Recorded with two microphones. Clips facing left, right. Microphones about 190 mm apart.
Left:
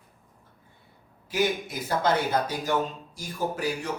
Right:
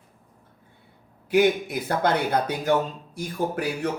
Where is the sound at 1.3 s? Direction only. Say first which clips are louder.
Right 7 dB; 60° right (ahead or behind).